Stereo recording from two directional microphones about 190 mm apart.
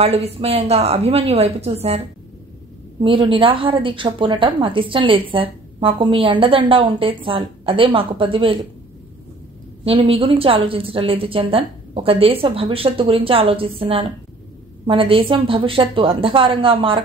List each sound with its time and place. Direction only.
0.0 s a woman's voice: 30° right (ahead or behind)
3.0 s a woman's voice: 25° right (ahead or behind)
9.8 s a woman's voice: 30° right (ahead or behind)